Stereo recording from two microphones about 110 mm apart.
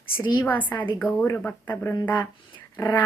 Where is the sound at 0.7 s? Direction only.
40° left (ahead or behind).